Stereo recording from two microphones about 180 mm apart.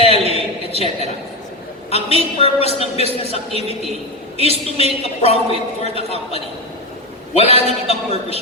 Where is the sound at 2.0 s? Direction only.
35° right (ahead or behind).